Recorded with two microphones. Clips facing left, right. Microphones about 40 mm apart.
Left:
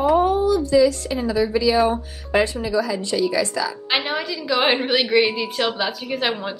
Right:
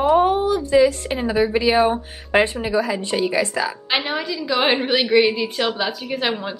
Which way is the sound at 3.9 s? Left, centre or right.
Centre.